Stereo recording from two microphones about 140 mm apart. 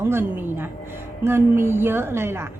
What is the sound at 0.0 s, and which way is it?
A woman's voice, 15° right (ahead or behind).